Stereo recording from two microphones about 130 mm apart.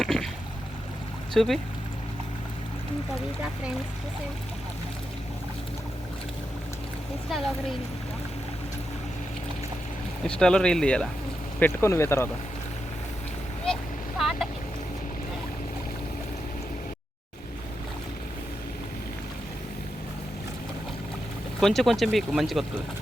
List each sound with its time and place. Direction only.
0.0 s a sound: centre (ahead or behind)
1.3 s speech: centre (ahead or behind)
7.3 s speech: centre (ahead or behind)
10.2 s speech: 5° left (ahead or behind)
11.6 s speech: 20° left (ahead or behind)
14.2 s a sound: centre (ahead or behind)
21.6 s speech: centre (ahead or behind)